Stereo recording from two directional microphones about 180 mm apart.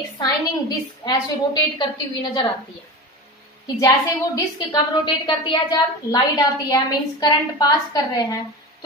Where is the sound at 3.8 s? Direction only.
20° left (ahead or behind).